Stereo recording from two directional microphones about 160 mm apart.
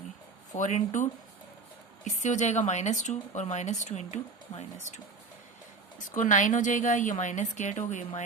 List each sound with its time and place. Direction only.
0.5 s speech: 50° left (ahead or behind)
2.0 s speech: 50° left (ahead or behind)
6.1 s speech: 55° left (ahead or behind)